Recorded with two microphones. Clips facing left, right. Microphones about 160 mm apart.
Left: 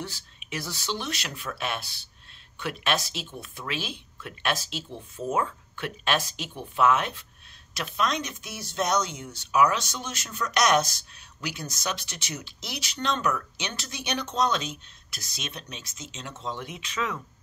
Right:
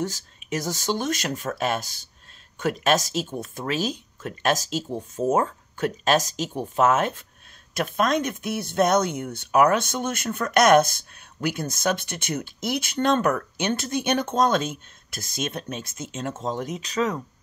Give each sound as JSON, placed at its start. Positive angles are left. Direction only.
{"t": 0.0, "sound": "speech", "side_deg": -45}